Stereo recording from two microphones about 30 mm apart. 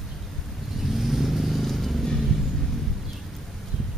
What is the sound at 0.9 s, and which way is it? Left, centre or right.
Vehicle, centre.